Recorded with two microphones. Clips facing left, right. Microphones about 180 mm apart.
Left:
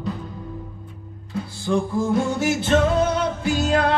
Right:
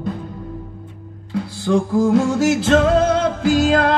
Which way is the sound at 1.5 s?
80° right.